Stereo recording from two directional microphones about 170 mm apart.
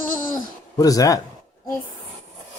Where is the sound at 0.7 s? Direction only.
20° left (ahead or behind).